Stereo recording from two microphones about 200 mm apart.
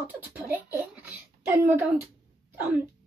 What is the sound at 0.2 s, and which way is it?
Speech, 10° right (ahead or behind).